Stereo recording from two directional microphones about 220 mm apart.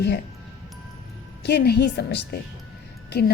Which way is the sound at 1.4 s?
50° left (ahead or behind).